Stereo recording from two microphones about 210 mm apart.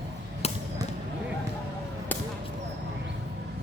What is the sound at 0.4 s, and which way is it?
Arrow, 30° left (ahead or behind).